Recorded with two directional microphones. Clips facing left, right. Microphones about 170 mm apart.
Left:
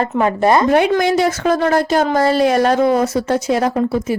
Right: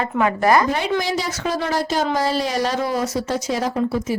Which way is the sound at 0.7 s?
55° left (ahead or behind).